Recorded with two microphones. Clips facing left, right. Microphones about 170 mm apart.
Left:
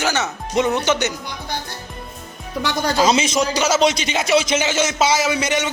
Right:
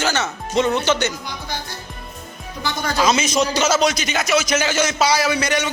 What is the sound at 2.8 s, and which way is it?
Speech, 30° left (ahead or behind).